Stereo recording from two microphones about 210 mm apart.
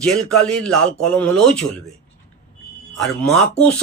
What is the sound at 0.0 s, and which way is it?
Speech, 5° left (ahead or behind).